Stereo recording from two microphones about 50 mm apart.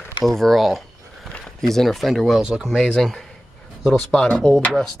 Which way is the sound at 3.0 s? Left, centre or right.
Centre.